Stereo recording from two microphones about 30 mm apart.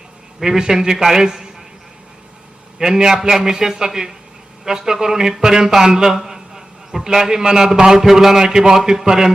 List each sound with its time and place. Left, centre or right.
0.4 s a man's voice: centre
2.7 s a man's voice: right